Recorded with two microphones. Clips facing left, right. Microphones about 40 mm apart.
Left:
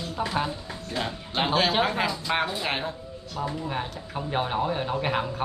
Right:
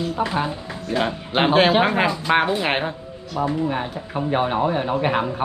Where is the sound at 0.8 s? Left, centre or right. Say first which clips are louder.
Right 9 dB; right.